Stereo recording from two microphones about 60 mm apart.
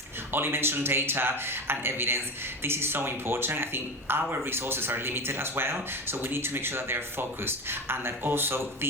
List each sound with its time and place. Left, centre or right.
0.3 s speech: right